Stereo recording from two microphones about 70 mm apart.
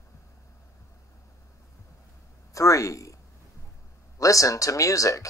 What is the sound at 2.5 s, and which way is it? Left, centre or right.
Speech, left.